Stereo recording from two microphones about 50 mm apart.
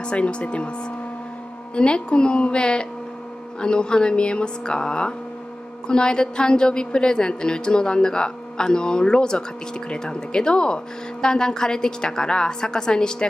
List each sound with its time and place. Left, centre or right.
0.0 s a woman's voice: left
1.8 s a woman's voice: centre